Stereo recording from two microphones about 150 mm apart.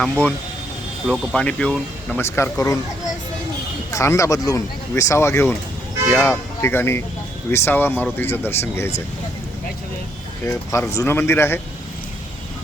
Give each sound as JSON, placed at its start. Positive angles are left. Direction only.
{"t": 0.0, "sound": "speech", "side_deg": 5}
{"t": 1.0, "sound": "speech", "side_deg": -5}
{"t": 1.4, "sound": "speech", "side_deg": 5}
{"t": 2.3, "sound": "speech", "side_deg": 20}
{"t": 3.9, "sound": "speech", "side_deg": 20}
{"t": 10.4, "sound": "speech", "side_deg": 20}